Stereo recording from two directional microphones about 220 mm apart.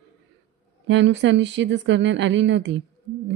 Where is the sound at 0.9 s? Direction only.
55° right (ahead or behind).